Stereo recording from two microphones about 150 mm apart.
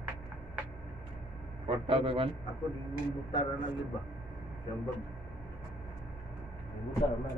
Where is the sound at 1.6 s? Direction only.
35° right (ahead or behind).